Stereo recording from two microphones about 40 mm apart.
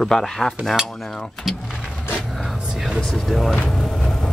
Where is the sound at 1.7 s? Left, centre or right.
Right.